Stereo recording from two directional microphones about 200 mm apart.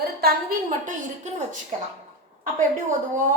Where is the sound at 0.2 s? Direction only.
50° right (ahead or behind).